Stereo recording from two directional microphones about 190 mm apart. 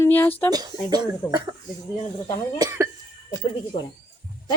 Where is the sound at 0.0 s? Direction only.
10° left (ahead or behind).